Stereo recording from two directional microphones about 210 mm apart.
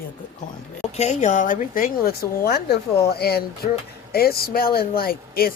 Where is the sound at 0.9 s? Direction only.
30° left (ahead or behind).